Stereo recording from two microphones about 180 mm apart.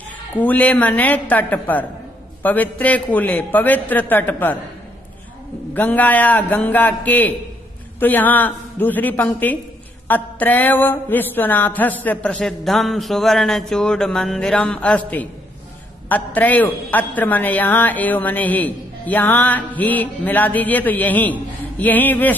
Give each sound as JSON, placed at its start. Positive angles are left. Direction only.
{"t": 0.4, "sound": "a woman's voice", "side_deg": 10}
{"t": 5.8, "sound": "a woman's voice", "side_deg": 10}